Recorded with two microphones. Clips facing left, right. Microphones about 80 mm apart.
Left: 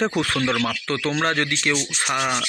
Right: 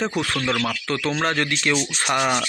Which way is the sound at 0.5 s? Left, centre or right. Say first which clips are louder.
Left 1 dB; centre.